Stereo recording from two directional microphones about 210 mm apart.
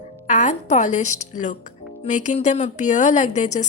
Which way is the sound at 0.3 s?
35° left (ahead or behind).